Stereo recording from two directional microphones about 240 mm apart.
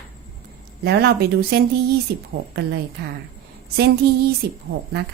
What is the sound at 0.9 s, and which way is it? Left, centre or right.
A woman's voice, right.